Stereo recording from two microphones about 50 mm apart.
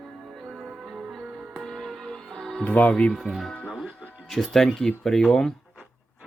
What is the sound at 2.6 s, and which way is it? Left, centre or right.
Speech, left.